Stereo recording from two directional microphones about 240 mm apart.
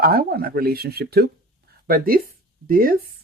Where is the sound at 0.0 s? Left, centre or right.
Right.